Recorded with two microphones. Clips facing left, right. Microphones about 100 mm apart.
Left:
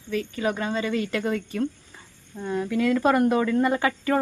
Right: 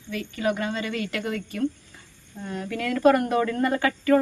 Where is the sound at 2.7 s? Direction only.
20° left (ahead or behind).